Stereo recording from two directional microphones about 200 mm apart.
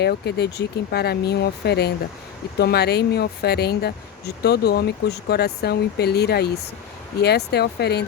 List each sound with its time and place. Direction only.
0.0 s speech: 55° left (ahead or behind)